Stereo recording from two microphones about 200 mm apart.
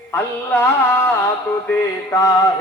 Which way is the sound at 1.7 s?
15° left (ahead or behind).